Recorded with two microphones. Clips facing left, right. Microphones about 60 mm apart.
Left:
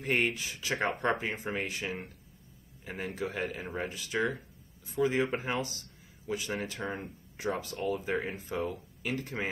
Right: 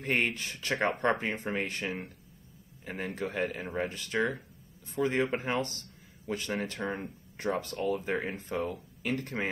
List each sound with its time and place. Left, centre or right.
0.0 s speech: centre